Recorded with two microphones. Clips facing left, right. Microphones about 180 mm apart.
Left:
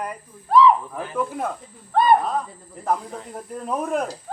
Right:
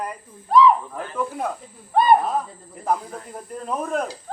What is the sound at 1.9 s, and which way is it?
Speech, 5° right (ahead or behind).